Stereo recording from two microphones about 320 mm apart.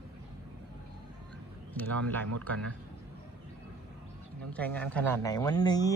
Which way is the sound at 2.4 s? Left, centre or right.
Centre.